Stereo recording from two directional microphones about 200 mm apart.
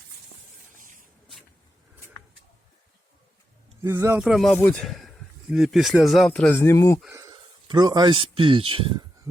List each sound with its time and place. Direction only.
3.8 s a man's voice: 15° right (ahead or behind)
4.2 s speech: centre (ahead or behind)
7.1 s a man's voice: 15° right (ahead or behind)
9.3 s a sound: 15° right (ahead or behind)